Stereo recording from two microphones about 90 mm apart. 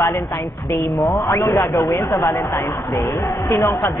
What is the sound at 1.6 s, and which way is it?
Speech, 45° left (ahead or behind).